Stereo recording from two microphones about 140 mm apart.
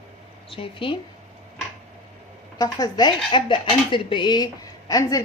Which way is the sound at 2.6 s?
30° left (ahead or behind).